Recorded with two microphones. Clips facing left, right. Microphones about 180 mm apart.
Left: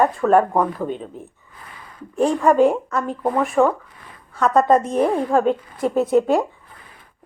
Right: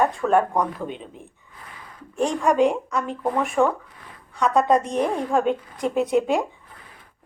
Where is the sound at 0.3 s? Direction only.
45° left (ahead or behind).